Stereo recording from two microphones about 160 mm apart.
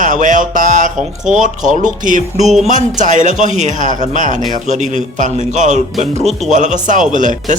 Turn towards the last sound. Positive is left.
turn(degrees=-55)  # may be behind; listen again after turning